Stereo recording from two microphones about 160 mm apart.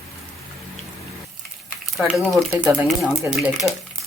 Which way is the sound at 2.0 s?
Centre (ahead or behind).